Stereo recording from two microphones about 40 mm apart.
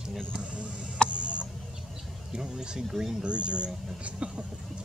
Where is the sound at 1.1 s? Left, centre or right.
Right.